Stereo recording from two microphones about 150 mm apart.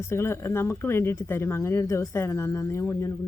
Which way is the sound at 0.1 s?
15° left (ahead or behind).